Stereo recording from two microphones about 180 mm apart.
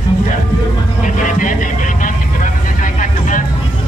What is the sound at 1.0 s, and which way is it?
Vehicle, 45° left (ahead or behind).